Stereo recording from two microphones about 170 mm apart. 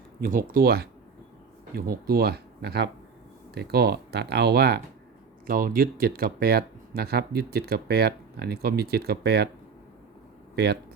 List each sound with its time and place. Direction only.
0.2 s speech: 55° right (ahead or behind)
5.5 s speech: 60° right (ahead or behind)
10.5 s speech: 75° right (ahead or behind)